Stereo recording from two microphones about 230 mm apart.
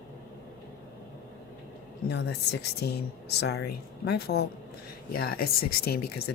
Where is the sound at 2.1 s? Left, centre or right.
Left.